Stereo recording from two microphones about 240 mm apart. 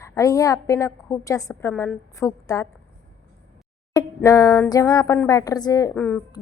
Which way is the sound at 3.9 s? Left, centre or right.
Centre.